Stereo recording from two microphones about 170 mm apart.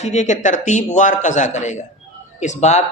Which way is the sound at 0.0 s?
45° left (ahead or behind).